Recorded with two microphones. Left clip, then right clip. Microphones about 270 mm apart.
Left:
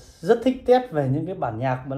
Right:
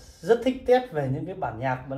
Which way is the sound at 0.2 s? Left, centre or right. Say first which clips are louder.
Left 2 dB; centre.